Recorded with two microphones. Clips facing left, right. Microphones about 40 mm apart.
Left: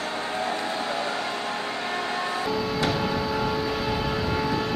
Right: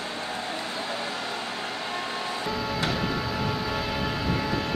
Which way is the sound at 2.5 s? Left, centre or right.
Centre.